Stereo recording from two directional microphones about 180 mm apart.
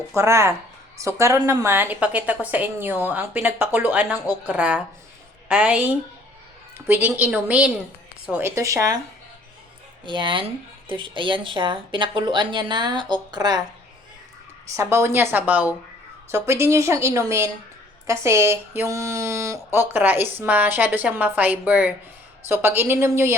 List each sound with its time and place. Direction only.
0.1 s speech: 15° right (ahead or behind)
10.1 s speech: 25° right (ahead or behind)
14.8 s speech: 15° right (ahead or behind)